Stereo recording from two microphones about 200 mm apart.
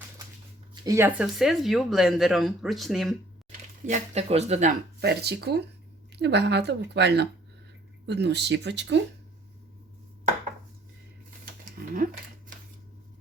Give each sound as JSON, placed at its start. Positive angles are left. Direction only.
{"t": 0.7, "sound": "speech", "side_deg": -15}
{"t": 3.8, "sound": "speech", "side_deg": -35}
{"t": 4.9, "sound": "a woman's voice", "side_deg": -55}
{"t": 11.8, "sound": "a sound", "side_deg": -50}